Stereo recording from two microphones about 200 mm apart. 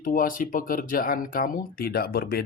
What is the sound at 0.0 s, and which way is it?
Speech, 45° left (ahead or behind).